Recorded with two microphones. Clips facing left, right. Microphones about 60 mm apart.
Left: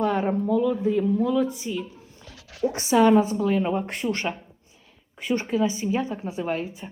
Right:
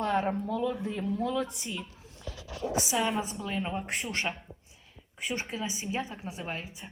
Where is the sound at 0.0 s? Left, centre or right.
Centre.